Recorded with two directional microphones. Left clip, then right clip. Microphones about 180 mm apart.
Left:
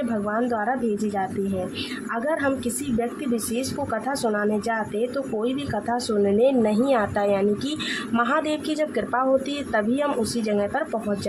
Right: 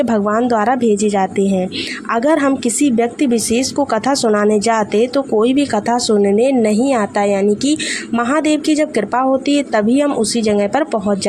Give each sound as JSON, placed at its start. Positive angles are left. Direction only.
{"t": 0.1, "sound": "speech", "side_deg": -35}
{"t": 3.5, "sound": "speech", "side_deg": -40}